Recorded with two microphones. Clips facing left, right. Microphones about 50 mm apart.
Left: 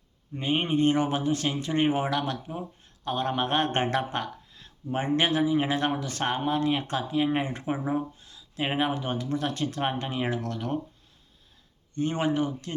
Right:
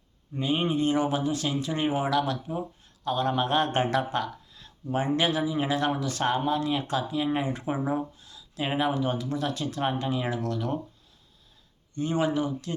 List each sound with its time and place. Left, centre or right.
0.3 s speech: left
7.7 s speech: left
8.2 s speech: left
11.9 s speech: left